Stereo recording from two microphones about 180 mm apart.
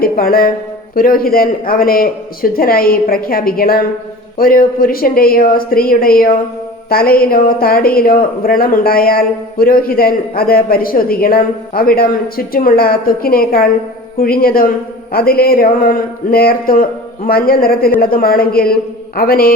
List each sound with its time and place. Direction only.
0.0 s speech: 55° left (ahead or behind)